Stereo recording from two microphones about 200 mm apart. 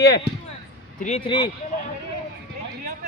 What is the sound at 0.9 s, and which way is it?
Speech, 35° left (ahead or behind).